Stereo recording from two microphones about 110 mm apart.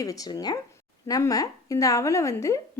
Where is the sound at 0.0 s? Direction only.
35° left (ahead or behind).